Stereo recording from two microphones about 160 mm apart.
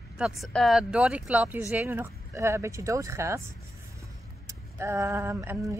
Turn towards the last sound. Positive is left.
turn(degrees=-15)  # may be behind; listen again after turning